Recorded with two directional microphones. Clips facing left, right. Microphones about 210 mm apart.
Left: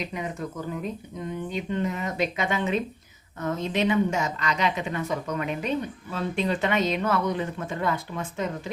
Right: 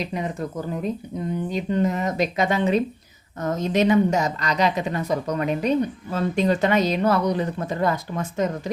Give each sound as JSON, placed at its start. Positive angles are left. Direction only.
{"t": 0.0, "sound": "a woman's voice", "side_deg": -35}